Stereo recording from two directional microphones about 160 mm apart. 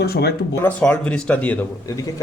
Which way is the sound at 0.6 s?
5° left (ahead or behind).